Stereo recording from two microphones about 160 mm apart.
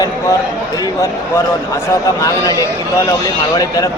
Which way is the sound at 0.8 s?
20° left (ahead or behind).